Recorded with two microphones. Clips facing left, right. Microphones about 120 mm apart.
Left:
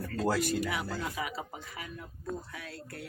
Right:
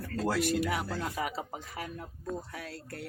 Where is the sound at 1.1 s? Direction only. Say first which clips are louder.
Right 2 dB; 40° right (ahead or behind).